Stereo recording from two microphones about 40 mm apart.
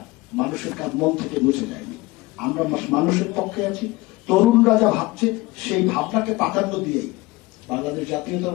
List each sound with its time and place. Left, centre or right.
0.3 s a man's voice: centre